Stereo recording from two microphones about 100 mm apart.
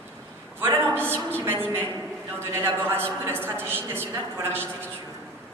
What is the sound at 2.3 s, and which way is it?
A man's voice, 25° right (ahead or behind).